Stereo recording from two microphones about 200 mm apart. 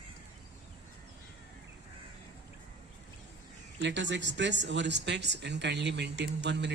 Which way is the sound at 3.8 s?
65° right (ahead or behind).